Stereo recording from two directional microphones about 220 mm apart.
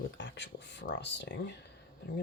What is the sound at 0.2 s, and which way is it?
Speech, 55° left (ahead or behind).